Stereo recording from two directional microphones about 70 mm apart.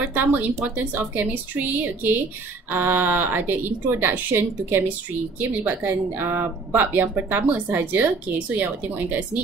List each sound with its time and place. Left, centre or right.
0.1 s speech: right